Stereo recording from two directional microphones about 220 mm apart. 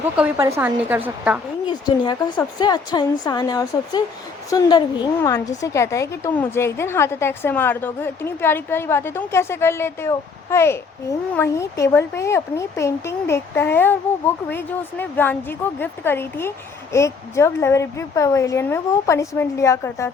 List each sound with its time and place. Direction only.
0.2 s speech: 15° right (ahead or behind)
1.6 s a woman's voice: 20° left (ahead or behind)